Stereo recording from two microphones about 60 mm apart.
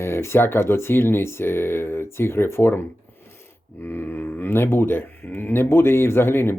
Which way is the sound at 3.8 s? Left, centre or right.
Left.